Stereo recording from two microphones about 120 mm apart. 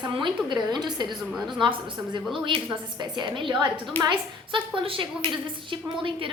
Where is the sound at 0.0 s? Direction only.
40° right (ahead or behind).